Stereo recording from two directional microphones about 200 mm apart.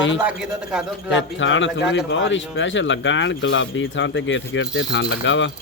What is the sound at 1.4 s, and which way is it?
Speech, 70° left (ahead or behind).